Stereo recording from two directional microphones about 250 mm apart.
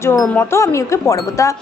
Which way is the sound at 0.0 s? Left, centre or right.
Centre.